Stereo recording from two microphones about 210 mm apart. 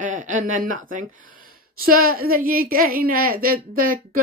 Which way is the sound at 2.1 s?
45° right (ahead or behind).